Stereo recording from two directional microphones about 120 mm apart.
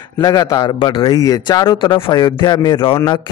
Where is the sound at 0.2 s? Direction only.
35° left (ahead or behind).